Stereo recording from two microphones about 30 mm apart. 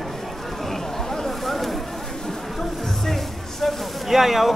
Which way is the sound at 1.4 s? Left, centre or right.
Centre.